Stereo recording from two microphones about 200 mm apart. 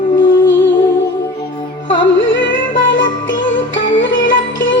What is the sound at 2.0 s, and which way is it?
Music, 65° left (ahead or behind).